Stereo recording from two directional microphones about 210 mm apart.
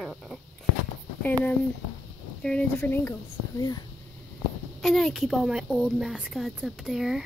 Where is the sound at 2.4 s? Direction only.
5° left (ahead or behind).